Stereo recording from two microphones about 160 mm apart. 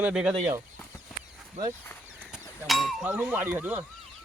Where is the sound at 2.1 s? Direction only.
Centre (ahead or behind).